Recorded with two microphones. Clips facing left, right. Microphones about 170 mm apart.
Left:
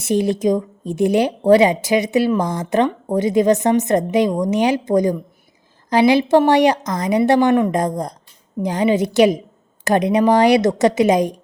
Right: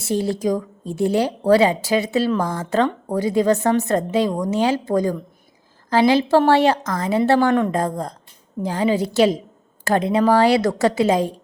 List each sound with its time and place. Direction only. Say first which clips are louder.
0.0 s a woman's voice: left 4 dB; 20° left (ahead or behind)